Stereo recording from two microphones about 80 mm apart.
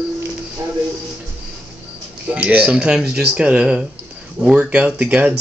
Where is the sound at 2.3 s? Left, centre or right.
Centre.